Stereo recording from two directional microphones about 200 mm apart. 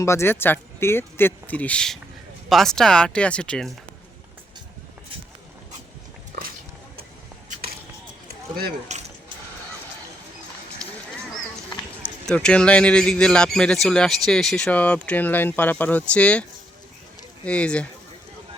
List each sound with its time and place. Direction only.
0.0 s a man's voice: 15° left (ahead or behind)
8.9 s mechanisms: 35° right (ahead or behind)
11.7 s a man's voice: 5° left (ahead or behind)